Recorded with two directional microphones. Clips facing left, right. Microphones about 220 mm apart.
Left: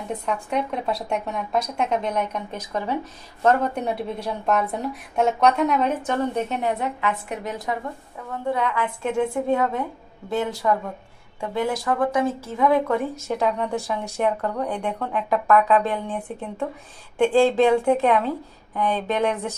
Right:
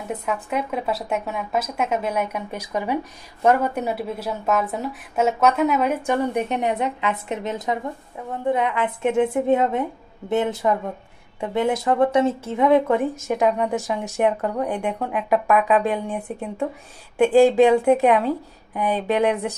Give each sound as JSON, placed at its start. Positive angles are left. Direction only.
{"t": 0.1, "sound": "speech", "side_deg": -5}
{"t": 17.2, "sound": "speech", "side_deg": -15}